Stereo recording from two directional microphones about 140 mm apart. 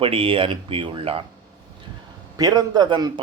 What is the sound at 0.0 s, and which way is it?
A man's voice, 40° right (ahead or behind).